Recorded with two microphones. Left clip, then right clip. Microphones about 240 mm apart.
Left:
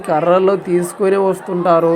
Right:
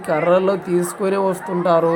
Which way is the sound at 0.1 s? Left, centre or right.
Centre.